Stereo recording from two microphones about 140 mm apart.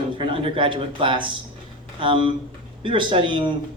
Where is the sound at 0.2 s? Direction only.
40° right (ahead or behind).